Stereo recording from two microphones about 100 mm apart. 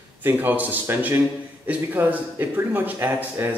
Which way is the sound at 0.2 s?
20° right (ahead or behind).